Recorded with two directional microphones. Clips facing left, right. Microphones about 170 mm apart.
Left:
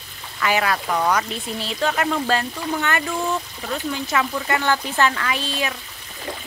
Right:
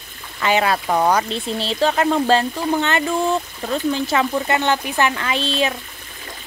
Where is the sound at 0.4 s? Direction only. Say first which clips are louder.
Right 3 dB; 25° right (ahead or behind).